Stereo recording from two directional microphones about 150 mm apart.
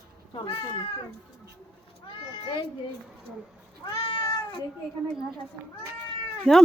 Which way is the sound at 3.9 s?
25° left (ahead or behind).